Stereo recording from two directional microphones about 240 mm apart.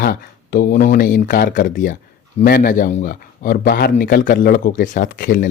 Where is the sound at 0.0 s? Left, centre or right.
Left.